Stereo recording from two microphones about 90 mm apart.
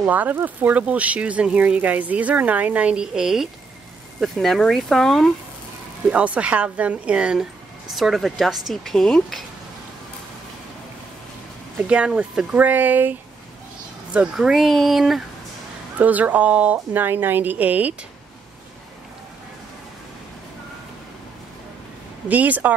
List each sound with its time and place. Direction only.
0.0 s speech: 20° right (ahead or behind); by 5.3 s 5° left (ahead or behind)
6.0 s speech: 15° right (ahead or behind); by 9.4 s 5° left (ahead or behind)
11.9 s speech: 10° right (ahead or behind)
12.5 s a woman's voice: 20° right (ahead or behind)
14.1 s speech: 10° right (ahead or behind)
16.0 s a woman's voice: 20° right (ahead or behind)
22.3 s speech: 15° right (ahead or behind)